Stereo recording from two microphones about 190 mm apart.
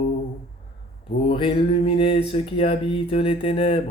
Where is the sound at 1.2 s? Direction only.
30° left (ahead or behind).